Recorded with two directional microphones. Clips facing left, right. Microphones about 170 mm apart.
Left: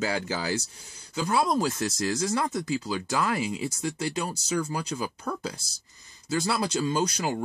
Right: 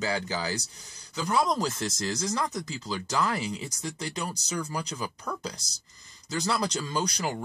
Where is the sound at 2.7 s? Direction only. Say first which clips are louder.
Left 4 dB; 15° left (ahead or behind).